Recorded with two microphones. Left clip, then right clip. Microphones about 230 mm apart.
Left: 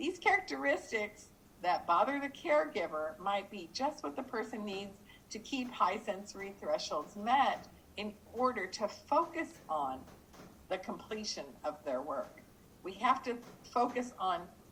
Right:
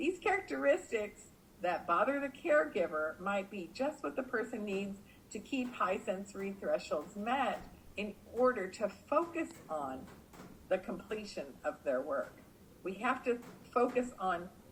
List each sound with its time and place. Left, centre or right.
0.0 s a sound: left
1.6 s speech: left
10.7 s speech: left